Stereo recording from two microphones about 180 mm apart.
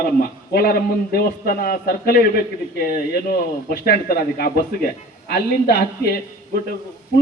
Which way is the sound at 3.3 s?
55° left (ahead or behind).